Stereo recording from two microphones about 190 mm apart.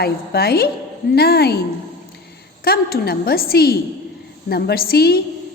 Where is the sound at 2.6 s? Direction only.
55° left (ahead or behind).